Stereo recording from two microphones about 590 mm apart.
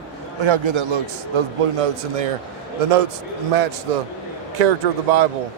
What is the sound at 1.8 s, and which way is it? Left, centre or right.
Speech, right.